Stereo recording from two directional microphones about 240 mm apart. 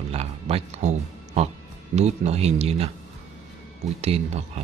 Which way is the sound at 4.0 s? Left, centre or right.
Right.